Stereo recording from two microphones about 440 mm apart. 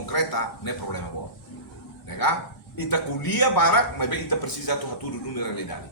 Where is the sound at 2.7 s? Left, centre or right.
Left.